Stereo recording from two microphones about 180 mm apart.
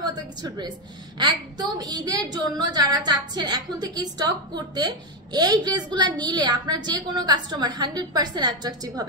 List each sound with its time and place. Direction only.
0.0 s a woman's voice: 20° right (ahead or behind)